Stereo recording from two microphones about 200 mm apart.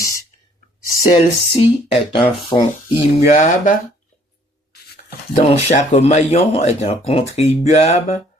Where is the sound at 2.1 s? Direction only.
25° left (ahead or behind).